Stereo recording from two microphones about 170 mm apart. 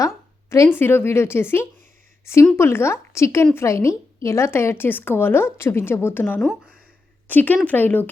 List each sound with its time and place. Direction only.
0.0 s a woman's voice: 15° left (ahead or behind)